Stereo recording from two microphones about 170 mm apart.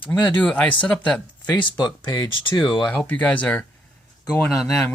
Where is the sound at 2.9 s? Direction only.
5° left (ahead or behind).